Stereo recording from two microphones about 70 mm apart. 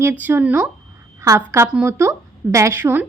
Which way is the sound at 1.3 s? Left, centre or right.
Right.